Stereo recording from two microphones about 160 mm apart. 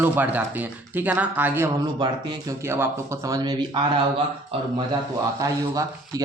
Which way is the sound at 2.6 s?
15° right (ahead or behind).